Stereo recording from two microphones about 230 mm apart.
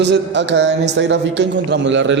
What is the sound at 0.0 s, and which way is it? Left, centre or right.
A man's voice, right.